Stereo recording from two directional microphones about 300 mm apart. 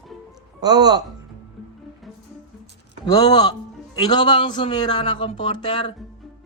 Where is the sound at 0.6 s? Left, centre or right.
Centre.